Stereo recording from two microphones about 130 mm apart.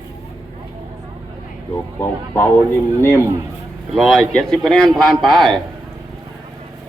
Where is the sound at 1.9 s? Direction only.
15° left (ahead or behind).